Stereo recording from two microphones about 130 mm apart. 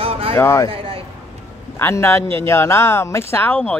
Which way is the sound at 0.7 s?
45° right (ahead or behind).